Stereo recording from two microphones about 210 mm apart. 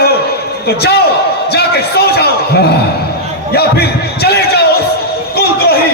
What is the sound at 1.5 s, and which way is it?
A man's voice, 50° left (ahead or behind).